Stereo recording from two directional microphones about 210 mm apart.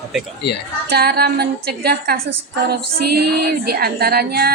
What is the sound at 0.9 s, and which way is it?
Female singing, 50° right (ahead or behind).